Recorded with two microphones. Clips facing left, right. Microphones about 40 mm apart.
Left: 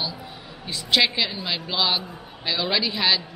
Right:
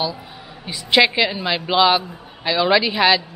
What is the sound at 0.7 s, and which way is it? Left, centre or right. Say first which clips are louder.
A woman's voice: right 5 dB; centre.